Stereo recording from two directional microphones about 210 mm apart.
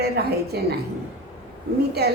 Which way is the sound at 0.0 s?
50° right (ahead or behind).